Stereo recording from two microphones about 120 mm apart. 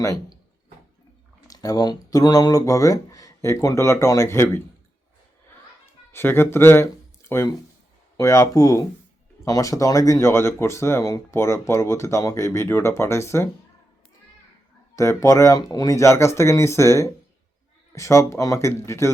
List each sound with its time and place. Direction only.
1.5 s speech: 30° left (ahead or behind)
6.1 s speech: 20° left (ahead or behind)
14.9 s speech: 25° left (ahead or behind)